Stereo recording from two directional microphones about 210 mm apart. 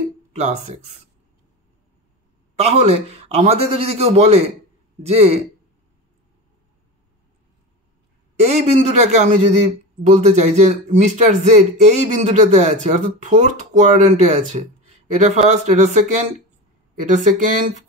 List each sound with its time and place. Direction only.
0.3 s speech: 30° right (ahead or behind)
2.5 s a man's voice: 30° right (ahead or behind)
8.5 s speech: 30° right (ahead or behind)